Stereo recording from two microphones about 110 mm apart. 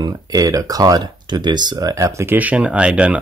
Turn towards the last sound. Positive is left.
turn(degrees=-10)  # may be behind; listen again after turning